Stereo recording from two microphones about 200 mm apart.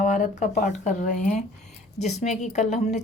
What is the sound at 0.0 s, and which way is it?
Speech, 40° left (ahead or behind).